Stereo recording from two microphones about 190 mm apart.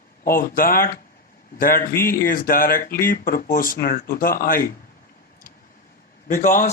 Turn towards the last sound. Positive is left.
turn(degrees=45)  # may be behind; listen again after turning